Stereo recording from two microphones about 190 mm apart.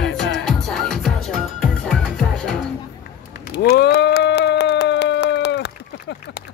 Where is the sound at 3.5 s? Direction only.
60° left (ahead or behind).